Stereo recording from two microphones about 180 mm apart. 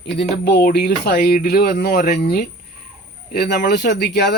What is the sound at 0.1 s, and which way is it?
Speech, 70° left (ahead or behind).